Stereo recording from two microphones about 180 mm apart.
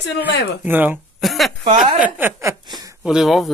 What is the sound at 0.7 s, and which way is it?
Speech, 10° right (ahead or behind).